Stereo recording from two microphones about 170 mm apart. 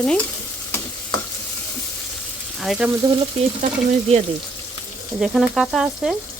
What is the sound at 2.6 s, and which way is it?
Speech, 5° right (ahead or behind).